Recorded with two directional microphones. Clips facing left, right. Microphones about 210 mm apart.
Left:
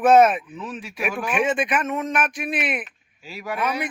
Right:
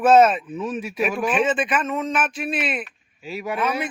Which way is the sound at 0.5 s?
20° right (ahead or behind).